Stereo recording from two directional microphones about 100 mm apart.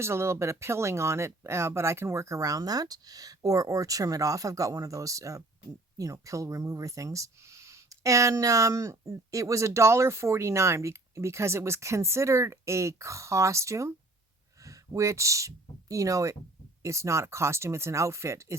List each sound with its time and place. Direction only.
0.0 s speech: 25° right (ahead or behind)